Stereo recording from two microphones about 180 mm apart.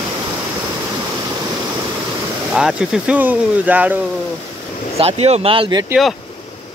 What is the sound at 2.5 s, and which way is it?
Speech, 5° right (ahead or behind).